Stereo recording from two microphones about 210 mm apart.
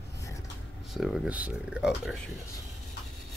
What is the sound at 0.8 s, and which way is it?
Speech, centre (ahead or behind).